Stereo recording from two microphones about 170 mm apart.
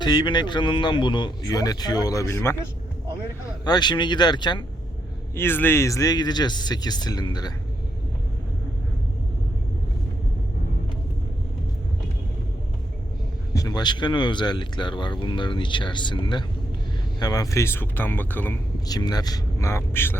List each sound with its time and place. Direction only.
0.0 s speech: 25° left (ahead or behind)
5.3 s speech: 15° left (ahead or behind)
13.5 s speech: 20° left (ahead or behind)
18.9 s speech: 25° left (ahead or behind)